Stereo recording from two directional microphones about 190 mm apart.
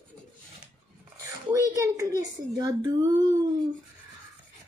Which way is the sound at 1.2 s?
15° right (ahead or behind).